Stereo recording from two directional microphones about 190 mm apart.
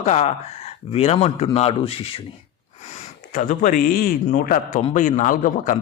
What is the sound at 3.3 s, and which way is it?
A man's voice, 45° left (ahead or behind).